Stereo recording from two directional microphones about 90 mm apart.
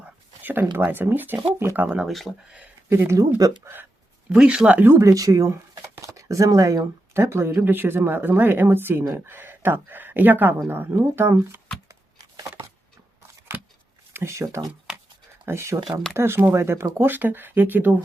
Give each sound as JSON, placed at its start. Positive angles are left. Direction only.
{"t": 0.0, "sound": "a sound", "side_deg": -20}
{"t": 0.8, "sound": "speech", "side_deg": -20}
{"t": 2.0, "sound": "speech", "side_deg": 0}
{"t": 2.9, "sound": "speech", "side_deg": -30}
{"t": 4.3, "sound": "speech", "side_deg": -10}
{"t": 4.8, "sound": "speech", "side_deg": -25}
{"t": 5.0, "sound": "speech", "side_deg": -40}
{"t": 14.1, "sound": "speech", "side_deg": -30}